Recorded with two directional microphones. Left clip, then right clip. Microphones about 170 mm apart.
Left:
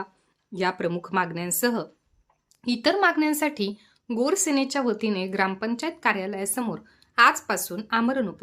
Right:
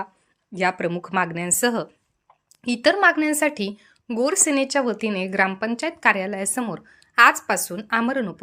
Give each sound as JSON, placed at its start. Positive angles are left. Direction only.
{"t": 0.5, "sound": "a woman's voice", "side_deg": -15}